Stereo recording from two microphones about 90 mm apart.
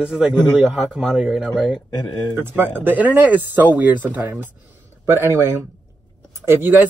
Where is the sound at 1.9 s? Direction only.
55° left (ahead or behind).